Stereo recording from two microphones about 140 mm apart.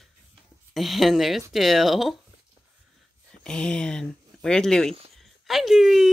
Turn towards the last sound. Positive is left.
turn(degrees=0)  # may be behind; listen again after turning